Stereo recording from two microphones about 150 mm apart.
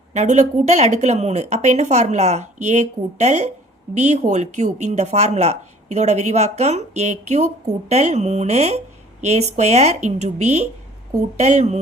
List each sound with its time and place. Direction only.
0.1 s speech: 50° right (ahead or behind)